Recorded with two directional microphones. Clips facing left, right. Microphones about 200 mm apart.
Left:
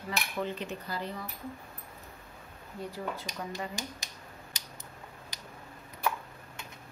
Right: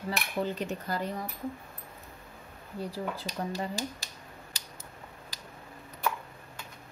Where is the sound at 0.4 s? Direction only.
40° right (ahead or behind).